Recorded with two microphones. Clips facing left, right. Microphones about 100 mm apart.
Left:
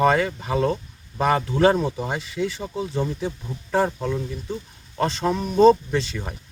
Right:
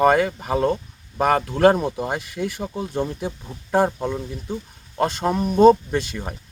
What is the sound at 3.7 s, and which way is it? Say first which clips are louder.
Speech: right 2 dB; 20° right (ahead or behind).